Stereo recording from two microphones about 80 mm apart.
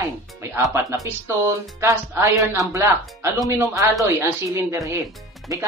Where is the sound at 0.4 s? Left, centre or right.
Right.